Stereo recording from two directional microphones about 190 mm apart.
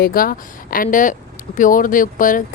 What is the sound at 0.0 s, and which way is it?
Speech, 50° left (ahead or behind).